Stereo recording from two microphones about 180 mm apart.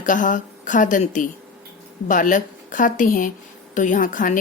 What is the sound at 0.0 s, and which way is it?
Speech, 45° left (ahead or behind).